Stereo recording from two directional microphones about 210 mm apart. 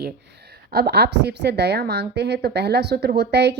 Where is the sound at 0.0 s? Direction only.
50° right (ahead or behind).